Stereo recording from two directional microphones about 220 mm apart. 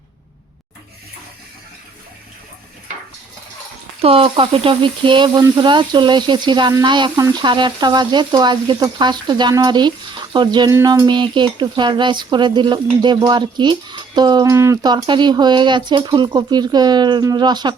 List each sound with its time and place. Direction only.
4.0 s speech: 25° right (ahead or behind)